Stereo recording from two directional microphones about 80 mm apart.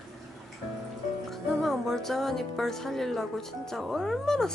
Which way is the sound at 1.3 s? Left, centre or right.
Centre.